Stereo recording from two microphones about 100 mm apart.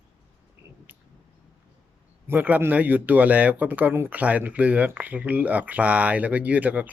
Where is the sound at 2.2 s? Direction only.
20° right (ahead or behind).